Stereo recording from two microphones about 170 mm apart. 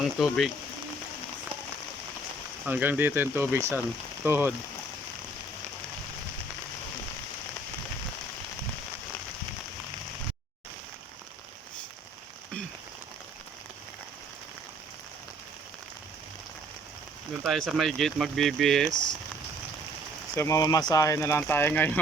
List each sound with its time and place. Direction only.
0.0 s speech: centre (ahead or behind)
2.6 s speech: 10° right (ahead or behind)
17.4 s speech: centre (ahead or behind)
20.3 s speech: 15° left (ahead or behind)